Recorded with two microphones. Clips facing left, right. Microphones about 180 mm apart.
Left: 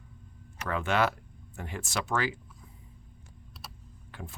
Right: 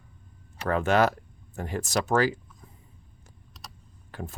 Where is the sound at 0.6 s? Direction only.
40° right (ahead or behind).